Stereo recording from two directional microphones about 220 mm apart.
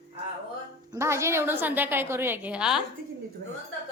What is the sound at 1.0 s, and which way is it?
A woman's voice, 10° right (ahead or behind).